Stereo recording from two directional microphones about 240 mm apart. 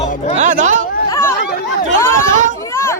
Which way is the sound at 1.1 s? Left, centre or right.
Centre.